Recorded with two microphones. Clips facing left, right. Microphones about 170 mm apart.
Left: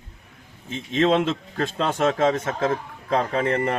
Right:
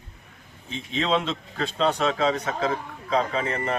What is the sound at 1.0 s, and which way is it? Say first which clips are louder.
A man's voice: left 5 dB; 50° left (ahead or behind).